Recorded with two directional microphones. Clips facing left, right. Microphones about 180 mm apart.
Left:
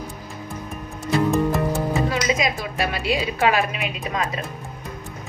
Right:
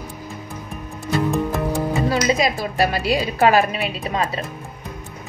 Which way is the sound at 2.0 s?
35° right (ahead or behind).